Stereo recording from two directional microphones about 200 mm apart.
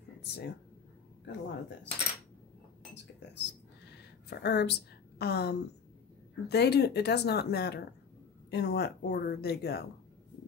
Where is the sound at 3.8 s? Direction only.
55° left (ahead or behind).